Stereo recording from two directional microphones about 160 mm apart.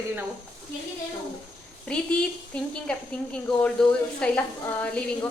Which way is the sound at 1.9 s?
5° left (ahead or behind).